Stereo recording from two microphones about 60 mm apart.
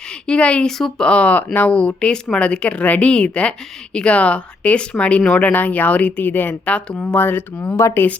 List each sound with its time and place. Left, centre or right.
0.3 s speech: centre
0.8 s speech: centre
1.0 s speech: left
7.2 s speech: left